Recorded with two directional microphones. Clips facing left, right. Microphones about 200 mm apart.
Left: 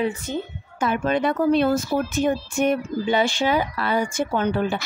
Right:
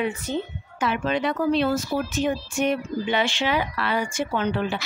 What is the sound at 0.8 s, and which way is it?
Speech, 50° left (ahead or behind).